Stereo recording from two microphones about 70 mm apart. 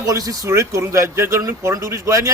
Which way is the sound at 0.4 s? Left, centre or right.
Right.